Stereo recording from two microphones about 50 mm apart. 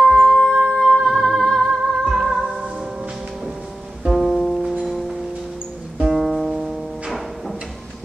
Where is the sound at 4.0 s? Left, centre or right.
Centre.